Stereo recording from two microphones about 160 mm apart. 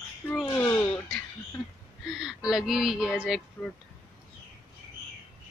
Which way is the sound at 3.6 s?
10° left (ahead or behind).